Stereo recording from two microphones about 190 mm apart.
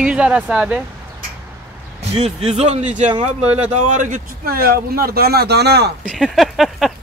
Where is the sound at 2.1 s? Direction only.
35° right (ahead or behind).